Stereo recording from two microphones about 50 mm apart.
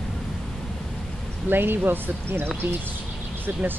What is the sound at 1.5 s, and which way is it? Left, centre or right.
Speech, right.